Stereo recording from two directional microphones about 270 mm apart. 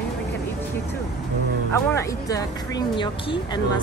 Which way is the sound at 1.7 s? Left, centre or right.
Centre.